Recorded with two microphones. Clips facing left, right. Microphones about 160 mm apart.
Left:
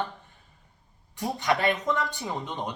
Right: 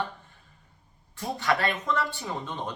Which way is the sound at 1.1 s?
20° left (ahead or behind).